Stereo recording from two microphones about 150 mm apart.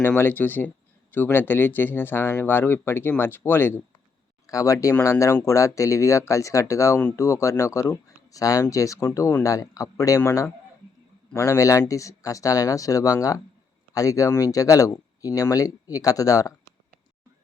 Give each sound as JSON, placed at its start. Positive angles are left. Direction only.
{"t": 0.0, "sound": "speech", "side_deg": 15}